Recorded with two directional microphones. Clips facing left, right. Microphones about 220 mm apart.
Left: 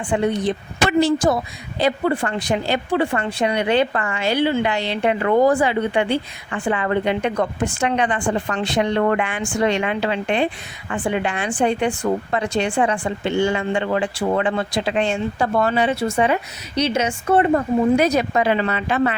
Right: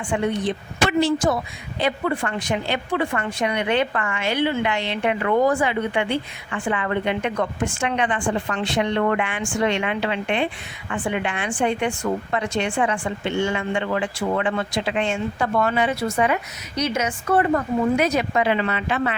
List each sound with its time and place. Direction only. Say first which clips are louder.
0.1 s speech: left 3 dB; 35° left (ahead or behind)